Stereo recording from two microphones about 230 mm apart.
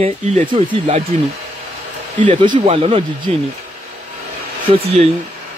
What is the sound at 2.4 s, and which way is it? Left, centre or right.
Speech, right.